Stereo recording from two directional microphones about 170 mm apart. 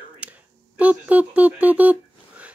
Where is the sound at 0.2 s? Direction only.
5° right (ahead or behind).